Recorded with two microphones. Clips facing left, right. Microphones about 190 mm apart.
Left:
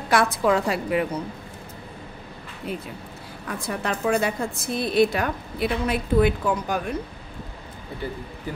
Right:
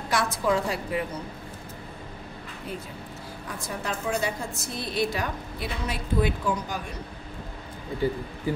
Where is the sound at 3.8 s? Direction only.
60° left (ahead or behind).